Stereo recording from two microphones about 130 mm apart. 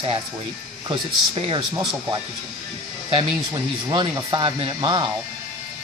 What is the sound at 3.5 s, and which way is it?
Speech, 30° right (ahead or behind).